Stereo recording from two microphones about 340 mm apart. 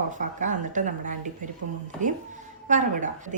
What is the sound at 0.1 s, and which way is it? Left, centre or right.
A woman's voice, right.